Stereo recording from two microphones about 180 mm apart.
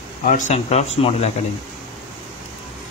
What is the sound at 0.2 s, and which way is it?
Speech, 45° left (ahead or behind).